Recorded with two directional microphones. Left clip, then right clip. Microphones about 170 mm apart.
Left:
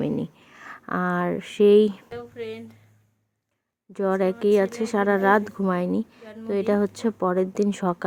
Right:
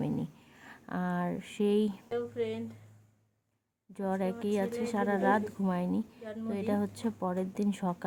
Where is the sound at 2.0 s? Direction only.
5° left (ahead or behind).